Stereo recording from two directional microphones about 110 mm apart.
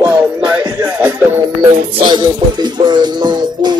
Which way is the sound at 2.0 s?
40° right (ahead or behind).